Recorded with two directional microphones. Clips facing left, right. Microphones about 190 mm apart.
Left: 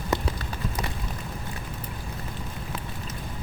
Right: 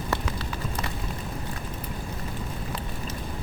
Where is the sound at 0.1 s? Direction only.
20° left (ahead or behind).